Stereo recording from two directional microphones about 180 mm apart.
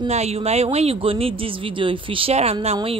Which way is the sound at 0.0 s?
35° right (ahead or behind).